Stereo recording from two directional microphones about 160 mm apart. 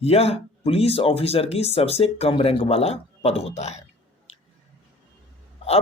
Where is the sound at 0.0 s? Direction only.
40° left (ahead or behind).